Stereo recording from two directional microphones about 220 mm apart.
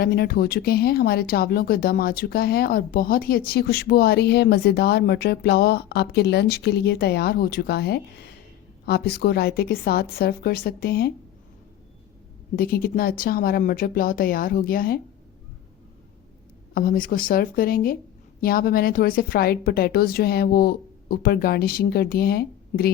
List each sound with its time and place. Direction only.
0.0 s speech: 45° left (ahead or behind)
12.5 s speech: 45° left (ahead or behind)
16.7 s speech: 40° left (ahead or behind)